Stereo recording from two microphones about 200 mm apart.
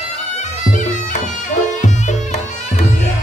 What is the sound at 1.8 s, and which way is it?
Music, 35° left (ahead or behind).